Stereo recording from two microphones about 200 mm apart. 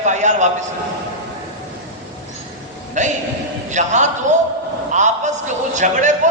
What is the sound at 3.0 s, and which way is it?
A man's voice, 35° right (ahead or behind).